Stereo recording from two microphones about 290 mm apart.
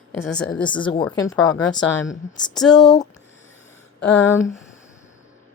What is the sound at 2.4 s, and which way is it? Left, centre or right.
Speech, centre.